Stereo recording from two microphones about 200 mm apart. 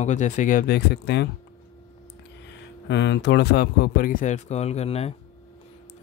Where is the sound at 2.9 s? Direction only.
60° left (ahead or behind).